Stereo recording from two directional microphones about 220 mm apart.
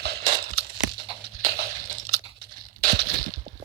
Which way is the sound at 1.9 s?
75° right (ahead or behind).